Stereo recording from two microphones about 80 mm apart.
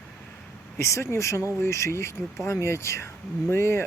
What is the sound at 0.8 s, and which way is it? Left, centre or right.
Speech, left.